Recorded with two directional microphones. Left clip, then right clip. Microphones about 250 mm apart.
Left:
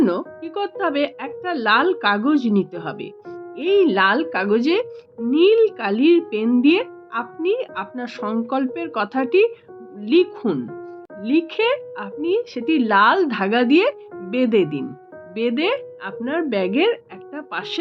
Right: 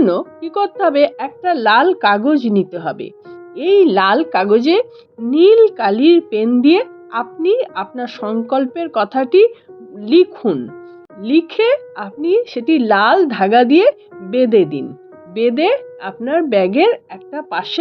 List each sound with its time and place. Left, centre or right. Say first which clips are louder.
0.0 s speech: right 5 dB; centre